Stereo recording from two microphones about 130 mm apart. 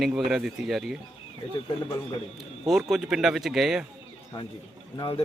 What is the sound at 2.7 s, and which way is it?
Speech, centre (ahead or behind).